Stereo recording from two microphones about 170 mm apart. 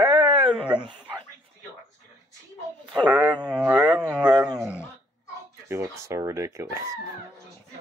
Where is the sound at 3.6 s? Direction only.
5° right (ahead or behind).